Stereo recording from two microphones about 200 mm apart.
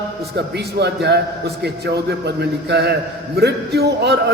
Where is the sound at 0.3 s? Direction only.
55° right (ahead or behind).